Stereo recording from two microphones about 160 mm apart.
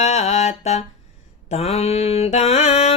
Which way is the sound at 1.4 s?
40° left (ahead or behind).